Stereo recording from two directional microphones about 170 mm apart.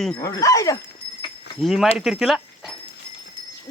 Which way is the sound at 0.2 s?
20° left (ahead or behind).